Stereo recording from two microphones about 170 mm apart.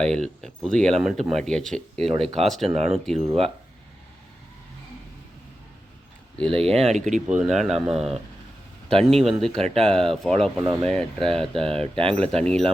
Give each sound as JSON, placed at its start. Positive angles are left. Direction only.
{"t": 0.0, "sound": "speech", "side_deg": 5}
{"t": 6.3, "sound": "speech", "side_deg": 5}
{"t": 6.9, "sound": "speech", "side_deg": -45}
{"t": 7.3, "sound": "speech", "side_deg": -5}
{"t": 9.6, "sound": "speech", "side_deg": -35}
{"t": 9.9, "sound": "speech", "side_deg": 0}